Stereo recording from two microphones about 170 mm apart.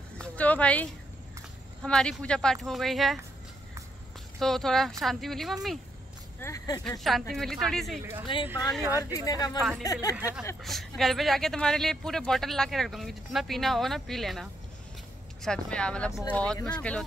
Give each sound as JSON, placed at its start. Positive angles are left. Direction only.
{"t": 0.2, "sound": "a sound", "side_deg": 10}
{"t": 1.8, "sound": "speech", "side_deg": 5}
{"t": 4.4, "sound": "speech", "side_deg": 0}
{"t": 6.4, "sound": "speech", "side_deg": 20}
{"t": 6.8, "sound": "speech", "side_deg": 0}
{"t": 8.3, "sound": "speech", "side_deg": 30}
{"t": 9.6, "sound": "speech", "side_deg": 0}
{"t": 16.1, "sound": "speech", "side_deg": 20}
{"t": 16.6, "sound": "speech", "side_deg": 5}